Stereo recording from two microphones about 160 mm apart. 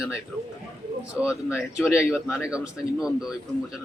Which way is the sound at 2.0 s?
5° right (ahead or behind).